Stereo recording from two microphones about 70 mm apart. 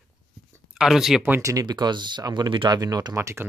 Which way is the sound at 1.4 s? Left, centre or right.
Right.